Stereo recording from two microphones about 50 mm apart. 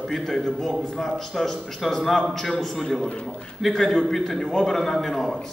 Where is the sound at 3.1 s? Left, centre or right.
Left.